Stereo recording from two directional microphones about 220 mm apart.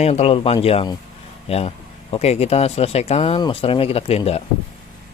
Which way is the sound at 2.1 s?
30° left (ahead or behind).